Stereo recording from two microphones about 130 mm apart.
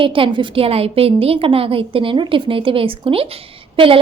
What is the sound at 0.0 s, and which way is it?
A woman's voice, 40° right (ahead or behind).